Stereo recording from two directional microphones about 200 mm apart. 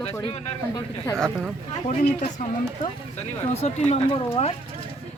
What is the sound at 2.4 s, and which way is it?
Speech, 40° left (ahead or behind).